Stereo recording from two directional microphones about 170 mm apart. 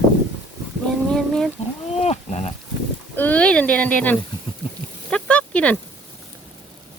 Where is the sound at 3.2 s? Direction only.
10° left (ahead or behind).